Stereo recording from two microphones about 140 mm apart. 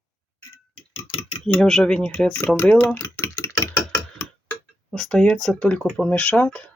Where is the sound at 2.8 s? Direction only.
15° left (ahead or behind).